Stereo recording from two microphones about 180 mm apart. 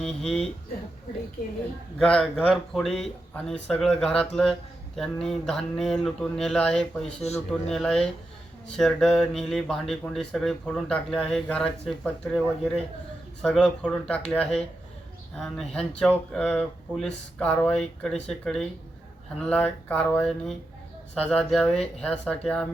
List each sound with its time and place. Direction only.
0.0 s speech: centre (ahead or behind)
2.0 s speech: 5° left (ahead or behind)
7.2 s a man's voice: 35° left (ahead or behind)
7.7 s speech: 5° left (ahead or behind)